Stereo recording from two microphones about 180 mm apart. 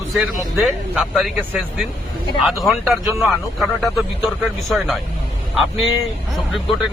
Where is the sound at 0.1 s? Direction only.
Centre (ahead or behind).